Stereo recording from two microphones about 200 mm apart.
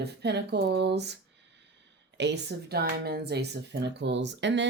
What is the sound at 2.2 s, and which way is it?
Speech, 55° right (ahead or behind).